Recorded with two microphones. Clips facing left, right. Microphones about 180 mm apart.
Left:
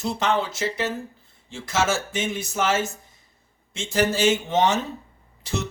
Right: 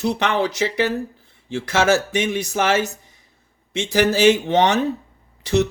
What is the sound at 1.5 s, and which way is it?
Speech, 65° right (ahead or behind).